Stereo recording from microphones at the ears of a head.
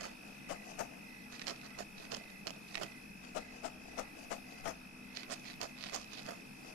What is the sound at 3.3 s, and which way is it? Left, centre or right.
Clip-clop, left.